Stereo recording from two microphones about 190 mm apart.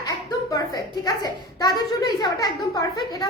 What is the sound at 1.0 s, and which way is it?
A woman's voice, 20° left (ahead or behind).